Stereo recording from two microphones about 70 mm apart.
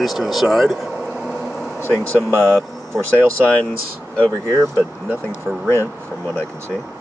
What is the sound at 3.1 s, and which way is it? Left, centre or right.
Speech, centre.